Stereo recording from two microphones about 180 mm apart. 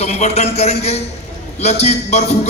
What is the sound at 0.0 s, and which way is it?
A man's voice, 40° left (ahead or behind).